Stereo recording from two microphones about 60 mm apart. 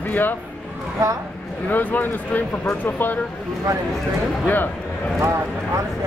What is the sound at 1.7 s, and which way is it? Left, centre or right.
Speech, left.